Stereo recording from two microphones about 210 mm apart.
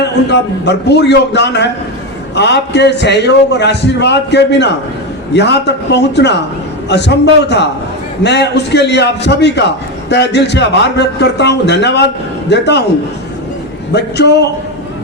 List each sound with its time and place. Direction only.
0.0 s a man's voice: 55° left (ahead or behind)
13.9 s a man's voice: 55° left (ahead or behind)